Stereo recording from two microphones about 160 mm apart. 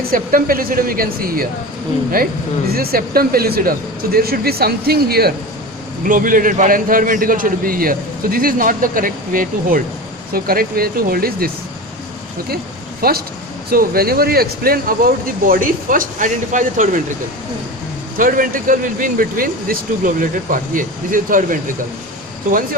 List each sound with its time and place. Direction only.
0.1 s a man's voice: 60° right (ahead or behind)
2.7 s speech: 70° right (ahead or behind)
6.1 s a man's voice: 60° right (ahead or behind)
13.0 s a man's voice: 70° right (ahead or behind); by 17.0 s 55° right (ahead or behind)
18.2 s a man's voice: 60° right (ahead or behind)